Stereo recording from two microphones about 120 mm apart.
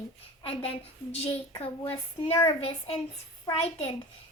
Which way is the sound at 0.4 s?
55° left (ahead or behind).